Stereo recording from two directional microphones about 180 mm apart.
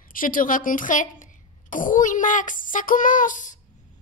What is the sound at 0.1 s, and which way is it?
Speech, 50° left (ahead or behind).